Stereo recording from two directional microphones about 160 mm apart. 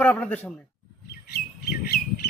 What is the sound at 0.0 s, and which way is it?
Speech, 10° left (ahead or behind).